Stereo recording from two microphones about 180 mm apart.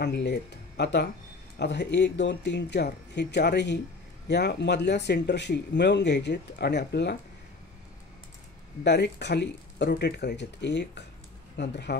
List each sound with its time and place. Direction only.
0.0 s speech: 70° left (ahead or behind)
8.8 s speech: 70° left (ahead or behind)